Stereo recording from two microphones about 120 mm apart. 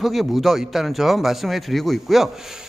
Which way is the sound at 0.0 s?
Centre (ahead or behind).